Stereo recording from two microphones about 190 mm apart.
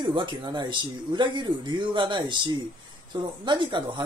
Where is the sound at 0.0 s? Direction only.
25° right (ahead or behind).